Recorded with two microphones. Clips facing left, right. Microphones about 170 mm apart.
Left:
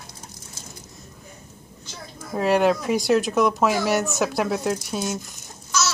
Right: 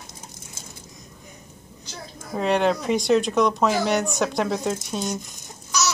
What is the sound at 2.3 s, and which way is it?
Speech, 5° left (ahead or behind).